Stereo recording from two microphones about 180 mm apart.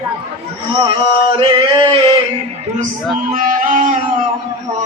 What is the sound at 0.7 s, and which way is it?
Speech, 25° right (ahead or behind).